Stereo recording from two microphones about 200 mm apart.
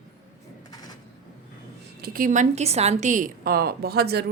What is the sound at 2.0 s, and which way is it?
A woman's voice, 45° right (ahead or behind).